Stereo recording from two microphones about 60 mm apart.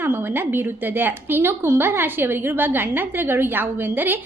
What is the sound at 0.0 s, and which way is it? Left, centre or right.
A woman's voice, right.